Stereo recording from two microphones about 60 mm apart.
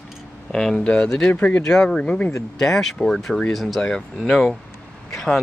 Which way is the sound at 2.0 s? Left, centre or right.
Left.